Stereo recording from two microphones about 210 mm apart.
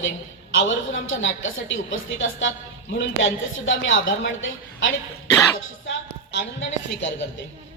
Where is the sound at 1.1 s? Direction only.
65° left (ahead or behind).